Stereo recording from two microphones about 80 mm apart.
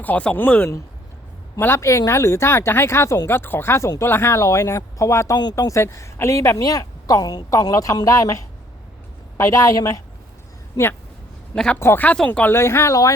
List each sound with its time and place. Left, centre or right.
0.0 s speech: centre; by 5.3 s left
5.3 s speech: left
5.5 s speech: left
6.6 s speech: left
10.8 s speech: left
11.5 s speech: centre
11.8 s speech: left
12.1 s speech: centre
12.4 s speech: left